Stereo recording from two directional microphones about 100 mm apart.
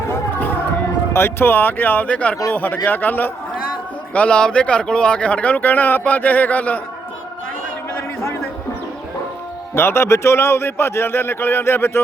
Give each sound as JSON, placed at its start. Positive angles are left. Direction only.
{"t": 0.1, "sound": "music", "side_deg": 20}
{"t": 1.1, "sound": "speech", "side_deg": 20}
{"t": 9.7, "sound": "speech", "side_deg": 25}